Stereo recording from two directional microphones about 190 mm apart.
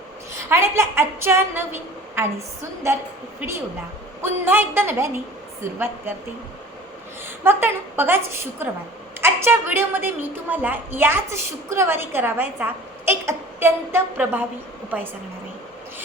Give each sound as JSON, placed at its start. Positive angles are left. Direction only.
{"t": 0.3, "sound": "a woman's voice", "side_deg": -15}
{"t": 4.2, "sound": "a woman's voice", "side_deg": -10}
{"t": 7.4, "sound": "a woman's voice", "side_deg": -10}